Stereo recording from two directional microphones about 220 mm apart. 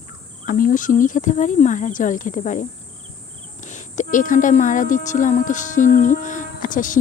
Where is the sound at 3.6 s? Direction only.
35° left (ahead or behind).